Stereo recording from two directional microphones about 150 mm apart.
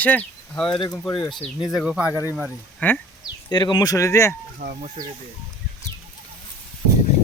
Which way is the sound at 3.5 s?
30° left (ahead or behind).